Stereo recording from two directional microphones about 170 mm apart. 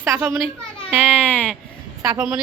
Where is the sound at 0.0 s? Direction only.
15° right (ahead or behind).